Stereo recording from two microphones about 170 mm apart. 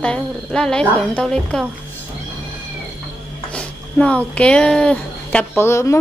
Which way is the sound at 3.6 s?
10° left (ahead or behind).